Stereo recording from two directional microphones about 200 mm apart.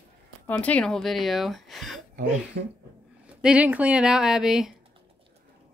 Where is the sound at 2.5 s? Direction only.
65° right (ahead or behind).